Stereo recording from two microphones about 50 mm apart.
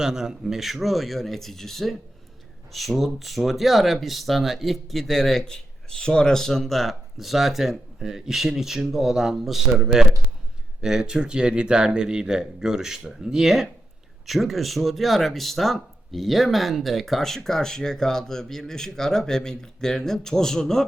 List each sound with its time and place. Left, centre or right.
0.0 s speech: centre